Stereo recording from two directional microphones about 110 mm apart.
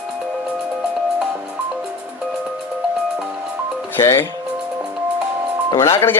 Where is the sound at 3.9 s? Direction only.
20° left (ahead or behind).